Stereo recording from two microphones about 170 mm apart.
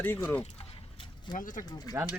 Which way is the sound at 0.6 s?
30° left (ahead or behind).